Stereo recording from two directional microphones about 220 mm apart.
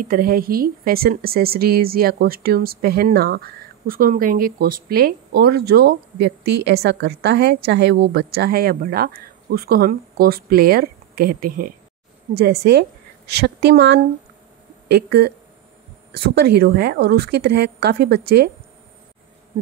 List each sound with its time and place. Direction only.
0.0 s speech: 40° right (ahead or behind)